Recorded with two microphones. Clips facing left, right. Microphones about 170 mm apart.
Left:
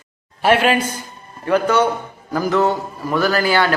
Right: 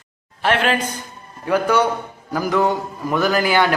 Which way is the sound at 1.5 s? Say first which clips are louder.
Left 1 dB; 10° right (ahead or behind).